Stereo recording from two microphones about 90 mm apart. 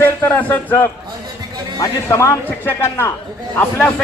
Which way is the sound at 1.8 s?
35° left (ahead or behind).